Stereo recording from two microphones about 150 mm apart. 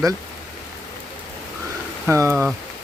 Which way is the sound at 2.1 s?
20° right (ahead or behind).